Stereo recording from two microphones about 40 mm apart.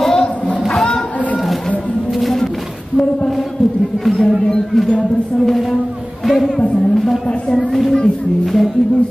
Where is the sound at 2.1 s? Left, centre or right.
Centre.